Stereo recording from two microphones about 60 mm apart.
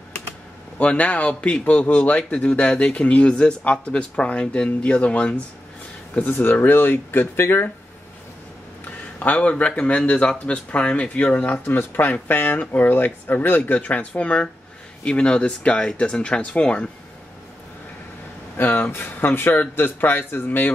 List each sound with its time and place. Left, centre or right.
0.7 s speech: left
6.1 s speech: left
9.2 s speech: left
11.6 s speech: left
18.6 s speech: left